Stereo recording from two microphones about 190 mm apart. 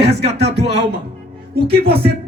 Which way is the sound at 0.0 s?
60° right (ahead or behind).